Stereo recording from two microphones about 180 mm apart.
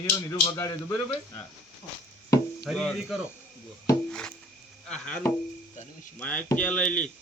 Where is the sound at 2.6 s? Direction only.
Centre (ahead or behind).